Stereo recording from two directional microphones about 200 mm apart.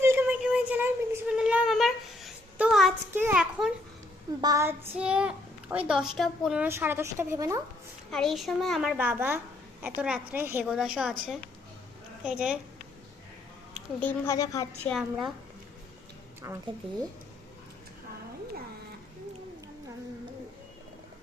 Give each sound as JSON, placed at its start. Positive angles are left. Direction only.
{"t": 0.0, "sound": "a sound", "side_deg": -10}
{"t": 4.4, "sound": "a sound", "side_deg": -15}
{"t": 5.9, "sound": "a woman's voice", "side_deg": 0}
{"t": 8.1, "sound": "a child's voice", "side_deg": 0}
{"t": 14.0, "sound": "a woman's voice", "side_deg": 15}
{"t": 14.8, "sound": "a child's voice", "side_deg": 0}
{"t": 16.4, "sound": "a woman's voice", "side_deg": -15}